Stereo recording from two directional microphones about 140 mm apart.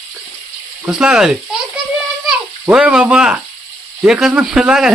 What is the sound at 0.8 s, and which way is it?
Speech, 5° right (ahead or behind).